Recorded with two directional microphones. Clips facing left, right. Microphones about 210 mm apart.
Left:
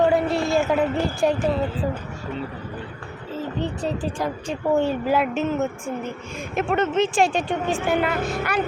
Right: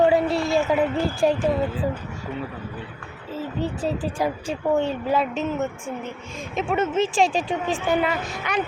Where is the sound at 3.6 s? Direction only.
5° right (ahead or behind).